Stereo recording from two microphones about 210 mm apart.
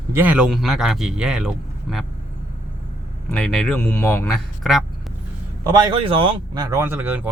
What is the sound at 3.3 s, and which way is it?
Speech, 5° left (ahead or behind).